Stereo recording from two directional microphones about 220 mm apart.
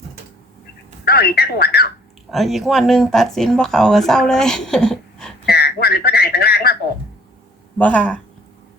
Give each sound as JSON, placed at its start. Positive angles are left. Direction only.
{"t": 1.0, "sound": "speech", "side_deg": 45}
{"t": 2.3, "sound": "speech", "side_deg": 0}
{"t": 5.5, "sound": "a sound", "side_deg": 45}
{"t": 7.8, "sound": "speech", "side_deg": 5}